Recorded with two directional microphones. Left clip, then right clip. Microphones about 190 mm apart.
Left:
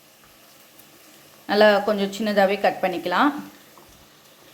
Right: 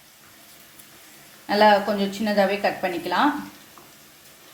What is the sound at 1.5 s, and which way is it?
A woman's voice, 35° left (ahead or behind).